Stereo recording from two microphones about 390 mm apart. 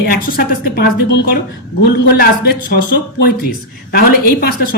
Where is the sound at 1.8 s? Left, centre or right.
Left.